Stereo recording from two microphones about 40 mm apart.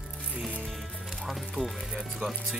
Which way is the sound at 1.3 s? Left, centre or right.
Centre.